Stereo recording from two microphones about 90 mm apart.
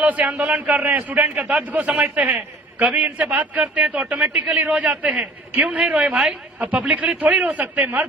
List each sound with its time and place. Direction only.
0.0 s a man's voice: 15° right (ahead or behind)